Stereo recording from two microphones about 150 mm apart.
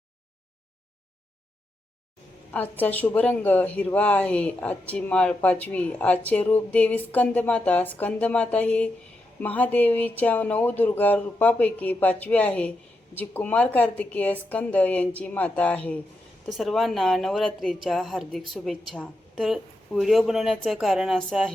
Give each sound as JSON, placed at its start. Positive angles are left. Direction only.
{"t": 2.5, "sound": "a woman's voice", "side_deg": 10}